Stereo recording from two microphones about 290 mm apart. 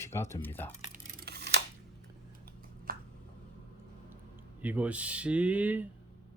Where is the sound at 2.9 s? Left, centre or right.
Right.